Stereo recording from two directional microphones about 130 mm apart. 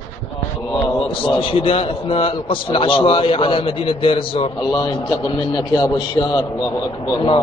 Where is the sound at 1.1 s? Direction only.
45° left (ahead or behind).